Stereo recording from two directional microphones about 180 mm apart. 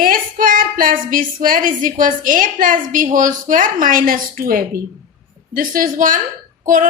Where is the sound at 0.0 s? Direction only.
50° right (ahead or behind).